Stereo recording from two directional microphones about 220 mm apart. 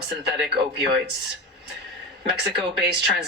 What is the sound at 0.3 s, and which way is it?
Speech, 50° right (ahead or behind).